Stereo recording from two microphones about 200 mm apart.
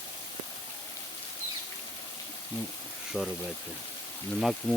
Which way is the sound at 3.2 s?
Centre (ahead or behind).